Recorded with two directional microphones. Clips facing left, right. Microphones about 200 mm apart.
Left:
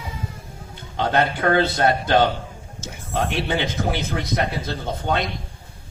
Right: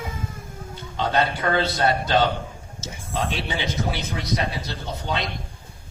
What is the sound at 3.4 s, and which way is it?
A man's voice, 55° left (ahead or behind).